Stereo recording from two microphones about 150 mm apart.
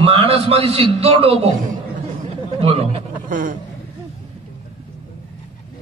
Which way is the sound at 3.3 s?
60° right (ahead or behind).